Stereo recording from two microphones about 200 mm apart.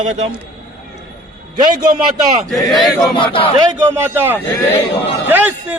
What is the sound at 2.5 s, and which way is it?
Speech, centre (ahead or behind).